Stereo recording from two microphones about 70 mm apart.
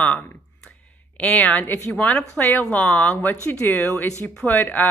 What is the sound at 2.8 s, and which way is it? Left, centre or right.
Speech, centre.